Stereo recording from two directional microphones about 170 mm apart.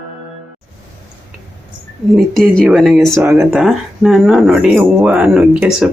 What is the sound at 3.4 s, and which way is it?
Speech, centre (ahead or behind).